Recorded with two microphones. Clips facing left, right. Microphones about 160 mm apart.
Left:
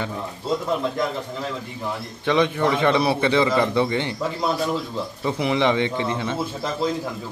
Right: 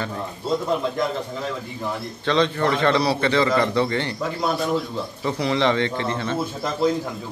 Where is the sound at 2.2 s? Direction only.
15° left (ahead or behind).